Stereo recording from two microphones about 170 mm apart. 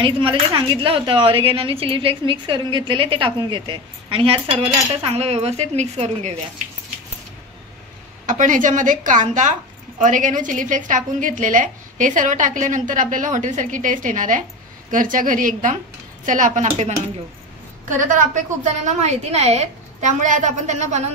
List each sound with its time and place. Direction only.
0.0 s speech: 30° right (ahead or behind)
8.3 s a woman's voice: 50° right (ahead or behind)
17.8 s a woman's voice: 50° right (ahead or behind)